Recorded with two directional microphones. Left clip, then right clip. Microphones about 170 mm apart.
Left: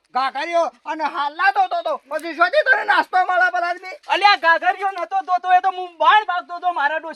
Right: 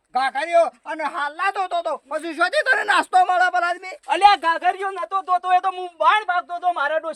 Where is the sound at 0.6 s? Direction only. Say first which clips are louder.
Right 1 dB; 30° right (ahead or behind).